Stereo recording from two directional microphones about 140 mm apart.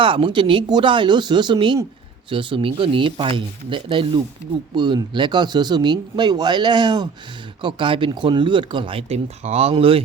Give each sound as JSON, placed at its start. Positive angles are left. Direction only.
{"t": 0.0, "sound": "speech", "side_deg": -40}